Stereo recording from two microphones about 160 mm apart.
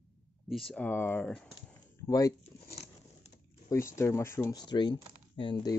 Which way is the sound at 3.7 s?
20° left (ahead or behind).